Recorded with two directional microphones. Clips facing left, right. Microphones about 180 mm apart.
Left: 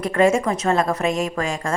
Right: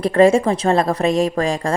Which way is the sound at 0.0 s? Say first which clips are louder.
Right 5 dB; 30° right (ahead or behind).